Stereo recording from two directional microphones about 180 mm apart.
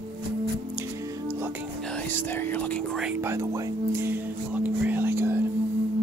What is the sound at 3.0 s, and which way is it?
Music, 10° right (ahead or behind).